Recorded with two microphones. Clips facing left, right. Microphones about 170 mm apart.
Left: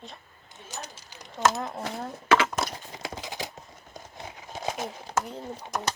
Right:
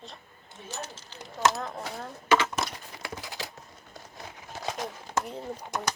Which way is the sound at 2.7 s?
20° left (ahead or behind).